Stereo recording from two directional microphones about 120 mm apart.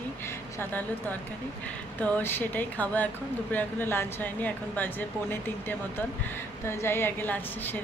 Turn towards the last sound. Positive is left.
turn(degrees=15)  # may be behind; listen again after turning